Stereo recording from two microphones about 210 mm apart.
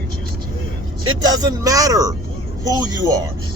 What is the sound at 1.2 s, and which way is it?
Speech, 20° right (ahead or behind).